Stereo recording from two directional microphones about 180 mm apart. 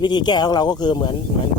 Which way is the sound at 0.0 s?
25° left (ahead or behind).